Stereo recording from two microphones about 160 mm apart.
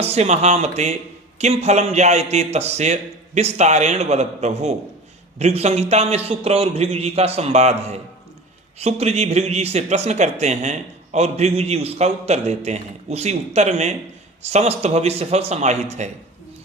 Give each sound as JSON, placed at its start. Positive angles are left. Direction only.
{"t": 0.0, "sound": "a man's voice", "side_deg": -40}